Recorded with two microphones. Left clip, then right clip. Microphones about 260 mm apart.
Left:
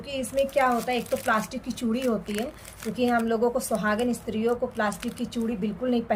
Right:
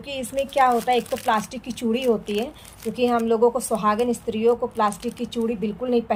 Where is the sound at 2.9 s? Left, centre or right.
Right.